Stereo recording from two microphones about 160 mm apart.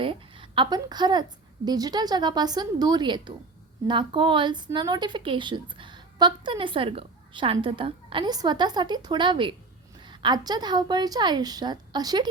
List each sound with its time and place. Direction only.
0.0 s a woman's voice: 30° right (ahead or behind)